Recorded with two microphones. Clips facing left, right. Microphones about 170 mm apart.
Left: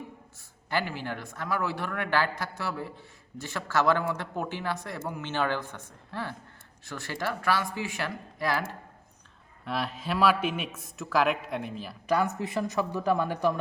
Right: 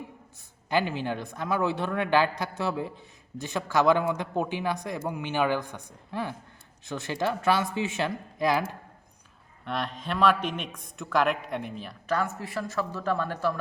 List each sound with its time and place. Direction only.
0.7 s a man's voice: 20° right (ahead or behind)
9.6 s speech: 5° left (ahead or behind)
12.0 s speech: 15° left (ahead or behind)